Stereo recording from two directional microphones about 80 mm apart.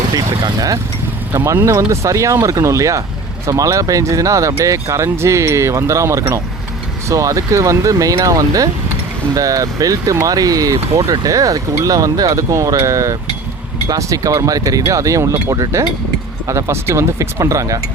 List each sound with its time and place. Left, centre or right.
1.5 s speech: right